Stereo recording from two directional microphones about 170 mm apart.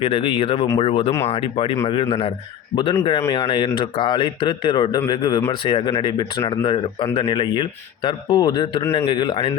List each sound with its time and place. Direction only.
0.0 s a man's voice: 30° left (ahead or behind)